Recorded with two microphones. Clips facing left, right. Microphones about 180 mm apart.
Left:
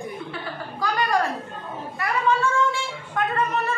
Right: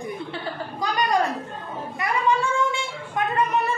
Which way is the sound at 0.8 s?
20° right (ahead or behind).